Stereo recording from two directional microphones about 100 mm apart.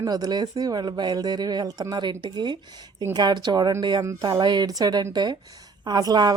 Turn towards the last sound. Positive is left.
turn(degrees=-40)  # may be behind; listen again after turning